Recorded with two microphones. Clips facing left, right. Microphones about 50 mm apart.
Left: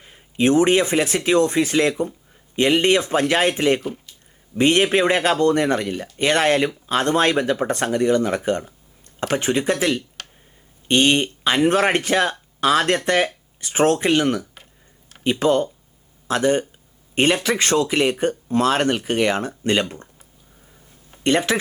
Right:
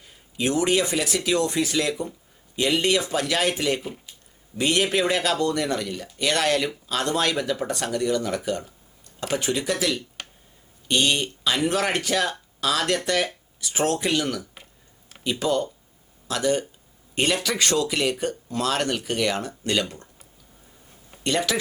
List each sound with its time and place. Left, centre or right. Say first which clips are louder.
0.0 s speech: left 7 dB; left
3.8 s speech: left 5 dB; centre
4.5 s speech: left 6 dB; left
21.2 s speech: left 5 dB; left